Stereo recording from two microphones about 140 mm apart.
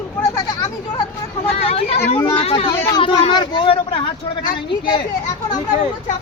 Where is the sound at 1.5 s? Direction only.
45° left (ahead or behind).